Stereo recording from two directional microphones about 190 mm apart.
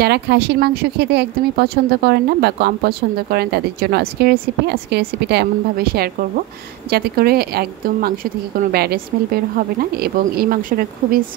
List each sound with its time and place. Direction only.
0.0 s speech: 60° right (ahead or behind)